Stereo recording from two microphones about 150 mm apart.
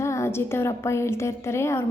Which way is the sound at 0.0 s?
20° left (ahead or behind).